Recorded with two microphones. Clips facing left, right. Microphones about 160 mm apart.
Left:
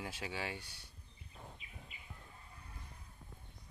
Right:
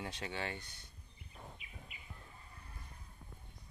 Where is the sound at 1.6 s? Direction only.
30° left (ahead or behind).